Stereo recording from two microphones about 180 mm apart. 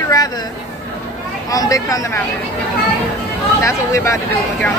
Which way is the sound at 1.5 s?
20° left (ahead or behind).